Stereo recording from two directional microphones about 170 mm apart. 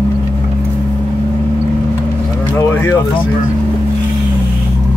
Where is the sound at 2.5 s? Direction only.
15° left (ahead or behind).